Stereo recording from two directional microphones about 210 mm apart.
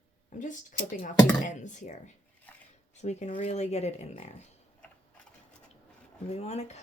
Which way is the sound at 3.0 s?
30° left (ahead or behind).